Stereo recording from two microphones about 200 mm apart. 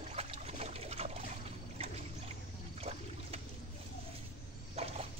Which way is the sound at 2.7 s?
30° right (ahead or behind).